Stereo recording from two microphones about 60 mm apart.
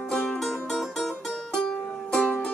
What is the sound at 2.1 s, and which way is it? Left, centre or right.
Music, centre.